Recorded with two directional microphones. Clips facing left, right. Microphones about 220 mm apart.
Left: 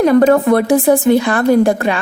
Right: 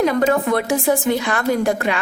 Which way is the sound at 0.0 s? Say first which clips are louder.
Left 7 dB; 40° left (ahead or behind).